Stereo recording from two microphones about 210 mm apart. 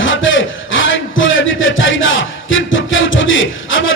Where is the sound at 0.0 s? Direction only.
65° left (ahead or behind).